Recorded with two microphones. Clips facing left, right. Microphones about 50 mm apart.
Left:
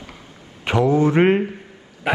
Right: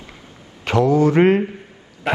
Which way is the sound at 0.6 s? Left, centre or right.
Left.